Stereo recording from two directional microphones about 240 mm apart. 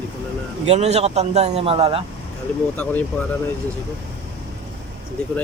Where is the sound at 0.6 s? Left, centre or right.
Right.